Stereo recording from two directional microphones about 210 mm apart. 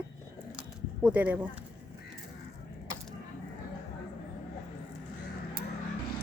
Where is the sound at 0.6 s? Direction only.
5° right (ahead or behind).